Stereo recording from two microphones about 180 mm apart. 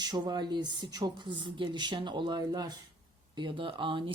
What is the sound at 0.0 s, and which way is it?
Speech, 25° right (ahead or behind).